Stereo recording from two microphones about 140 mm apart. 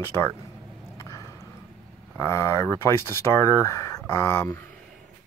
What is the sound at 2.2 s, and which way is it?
Speech, 20° left (ahead or behind).